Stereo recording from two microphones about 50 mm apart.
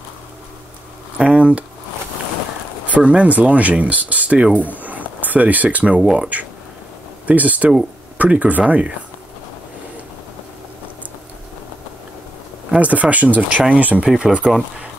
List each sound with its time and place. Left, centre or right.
1.1 s speech: right
2.9 s speech: right
12.7 s speech: right
14.0 s speech: centre